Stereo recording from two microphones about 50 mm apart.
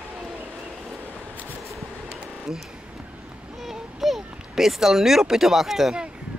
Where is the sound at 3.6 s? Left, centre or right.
Centre.